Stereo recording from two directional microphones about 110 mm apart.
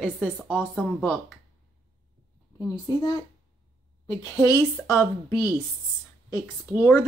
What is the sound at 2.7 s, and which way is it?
Speech, 40° left (ahead or behind).